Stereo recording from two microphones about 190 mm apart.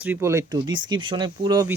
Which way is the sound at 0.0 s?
10° right (ahead or behind).